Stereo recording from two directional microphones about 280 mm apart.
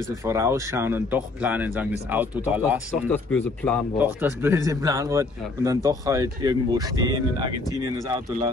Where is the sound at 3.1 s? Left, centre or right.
Centre.